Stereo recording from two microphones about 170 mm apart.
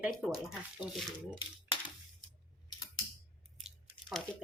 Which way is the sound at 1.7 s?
30° left (ahead or behind).